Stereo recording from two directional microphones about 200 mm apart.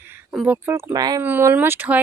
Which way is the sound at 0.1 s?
5° right (ahead or behind).